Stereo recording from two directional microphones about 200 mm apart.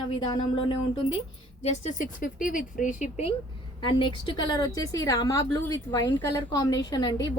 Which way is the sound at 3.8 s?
25° left (ahead or behind).